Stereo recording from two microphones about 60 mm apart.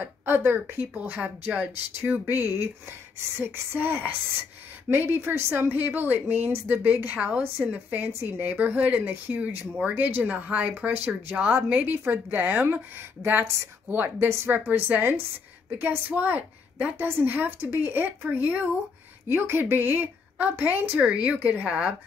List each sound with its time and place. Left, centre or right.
0.0 s a woman's voice: right
8.1 s a woman's voice: right
9.0 s a woman's voice: right
9.8 s a woman's voice: right
14.7 s a woman's voice: right
19.3 s a woman's voice: right
21.0 s a woman's voice: centre